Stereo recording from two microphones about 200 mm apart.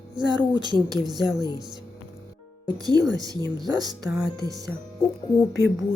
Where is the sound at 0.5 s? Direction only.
20° right (ahead or behind).